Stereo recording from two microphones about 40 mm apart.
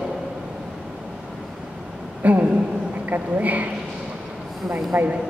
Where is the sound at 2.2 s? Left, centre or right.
Right.